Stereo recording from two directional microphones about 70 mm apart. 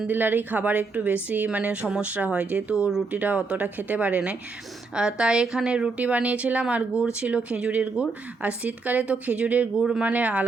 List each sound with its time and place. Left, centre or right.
0.1 s a woman's voice: right